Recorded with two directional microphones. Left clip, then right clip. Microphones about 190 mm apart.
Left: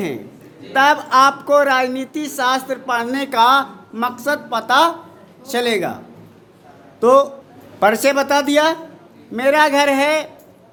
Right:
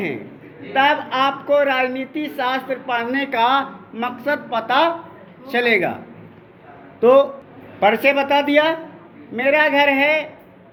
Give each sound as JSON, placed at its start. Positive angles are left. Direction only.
{"t": 0.7, "sound": "a man's voice", "side_deg": 40}
{"t": 7.0, "sound": "a man's voice", "side_deg": 25}
{"t": 7.8, "sound": "speech", "side_deg": 40}